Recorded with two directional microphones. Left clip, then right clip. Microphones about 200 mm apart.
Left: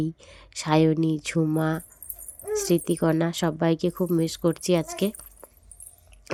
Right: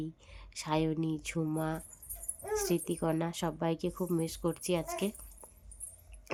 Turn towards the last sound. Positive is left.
turn(degrees=25)  # may be behind; listen again after turning